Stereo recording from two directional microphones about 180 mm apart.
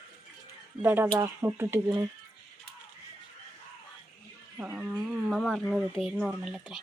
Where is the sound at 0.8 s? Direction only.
10° right (ahead or behind).